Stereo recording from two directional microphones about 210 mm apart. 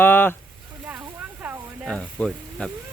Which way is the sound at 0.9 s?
10° right (ahead or behind).